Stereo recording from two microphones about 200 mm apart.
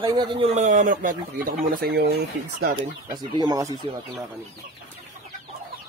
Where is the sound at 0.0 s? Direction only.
25° right (ahead or behind); by 2.7 s 50° right (ahead or behind).